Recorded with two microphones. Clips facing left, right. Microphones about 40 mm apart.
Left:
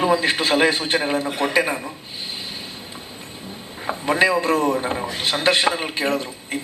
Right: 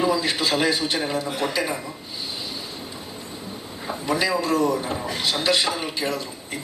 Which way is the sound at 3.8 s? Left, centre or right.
Left.